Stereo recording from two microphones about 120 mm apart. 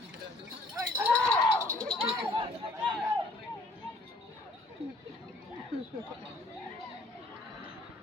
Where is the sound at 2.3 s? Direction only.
45° right (ahead or behind).